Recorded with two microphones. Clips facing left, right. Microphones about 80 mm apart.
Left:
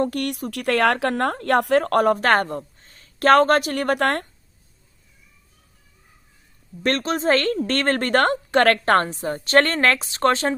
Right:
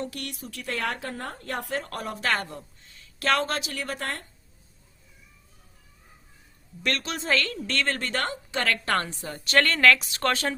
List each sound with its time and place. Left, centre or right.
0.0 s speech: left
2.1 s speech: left
6.8 s a woman's voice: left